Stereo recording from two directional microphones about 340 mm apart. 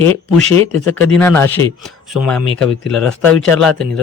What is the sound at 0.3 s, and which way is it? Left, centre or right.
Speech, centre.